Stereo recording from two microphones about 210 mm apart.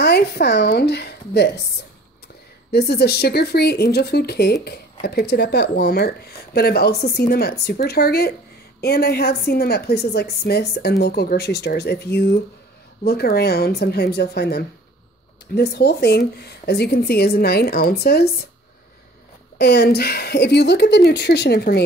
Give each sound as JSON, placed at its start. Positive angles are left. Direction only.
{"t": 0.0, "sound": "speech", "side_deg": 50}
{"t": 2.7, "sound": "a woman's voice", "side_deg": 50}
{"t": 19.6, "sound": "a woman's voice", "side_deg": 50}